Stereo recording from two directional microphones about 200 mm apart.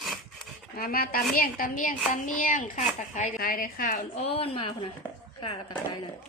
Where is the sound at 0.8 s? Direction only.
45° left (ahead or behind).